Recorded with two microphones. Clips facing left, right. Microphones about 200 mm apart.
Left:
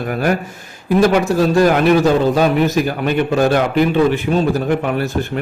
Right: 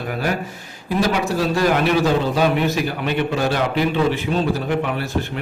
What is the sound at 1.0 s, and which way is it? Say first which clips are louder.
A man's voice: left 6 dB; 50° left (ahead or behind).